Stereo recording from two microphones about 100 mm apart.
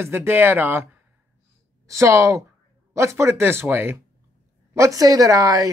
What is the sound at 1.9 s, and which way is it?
Speech, 30° right (ahead or behind).